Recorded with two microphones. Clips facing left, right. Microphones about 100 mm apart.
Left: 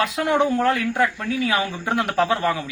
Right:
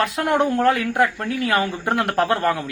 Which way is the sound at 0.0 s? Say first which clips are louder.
Even; centre (ahead or behind).